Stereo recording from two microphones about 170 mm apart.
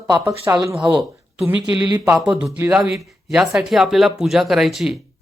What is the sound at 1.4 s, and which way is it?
Speech, 5° right (ahead or behind).